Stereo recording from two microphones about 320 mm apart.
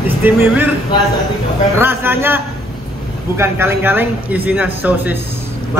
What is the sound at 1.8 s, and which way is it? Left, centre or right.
A man's voice, centre.